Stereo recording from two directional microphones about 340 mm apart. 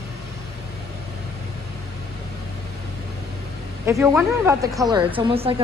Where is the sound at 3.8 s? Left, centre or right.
Centre.